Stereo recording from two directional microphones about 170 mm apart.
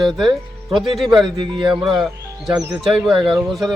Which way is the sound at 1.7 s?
Centre (ahead or behind).